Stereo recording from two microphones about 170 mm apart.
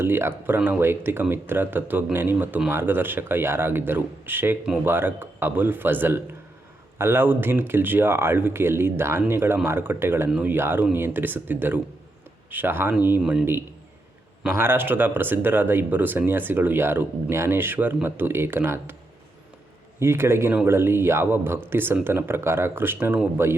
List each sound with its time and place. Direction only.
0.0 s speech: 15° right (ahead or behind)
20.0 s speech: 15° right (ahead or behind)